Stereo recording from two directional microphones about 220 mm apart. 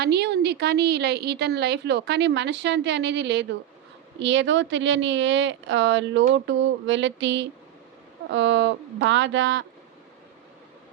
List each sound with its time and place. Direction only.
0.0 s a woman's voice: 50° right (ahead or behind)